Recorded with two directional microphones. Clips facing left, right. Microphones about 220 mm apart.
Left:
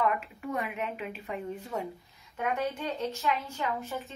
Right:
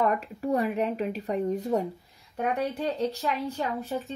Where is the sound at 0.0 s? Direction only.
40° right (ahead or behind).